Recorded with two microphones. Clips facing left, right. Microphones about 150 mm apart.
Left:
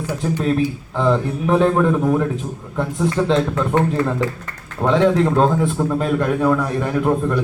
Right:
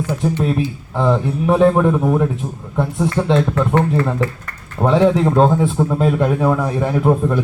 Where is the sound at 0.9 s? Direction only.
5° right (ahead or behind).